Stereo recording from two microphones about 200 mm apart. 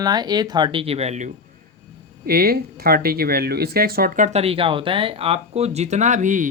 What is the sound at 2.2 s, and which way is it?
Speech, 50° right (ahead or behind).